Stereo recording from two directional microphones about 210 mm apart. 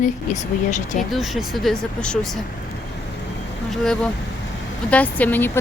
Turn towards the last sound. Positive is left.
turn(degrees=10)  # may be behind; listen again after turning